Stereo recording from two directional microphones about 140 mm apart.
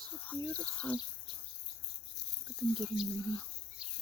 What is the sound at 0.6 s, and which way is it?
Speech, 10° left (ahead or behind).